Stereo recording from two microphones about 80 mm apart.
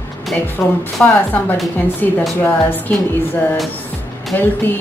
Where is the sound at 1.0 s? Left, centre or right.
Left.